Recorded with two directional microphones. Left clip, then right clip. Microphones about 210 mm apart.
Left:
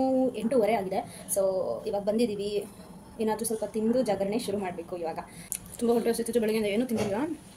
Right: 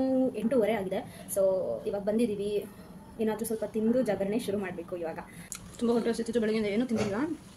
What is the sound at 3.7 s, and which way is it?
Speech, 5° right (ahead or behind).